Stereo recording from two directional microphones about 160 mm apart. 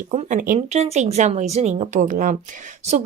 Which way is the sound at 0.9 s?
45° right (ahead or behind).